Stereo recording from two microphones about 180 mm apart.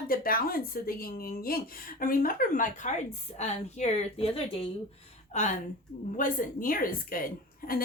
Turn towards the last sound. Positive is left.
turn(degrees=55)  # may be behind; listen again after turning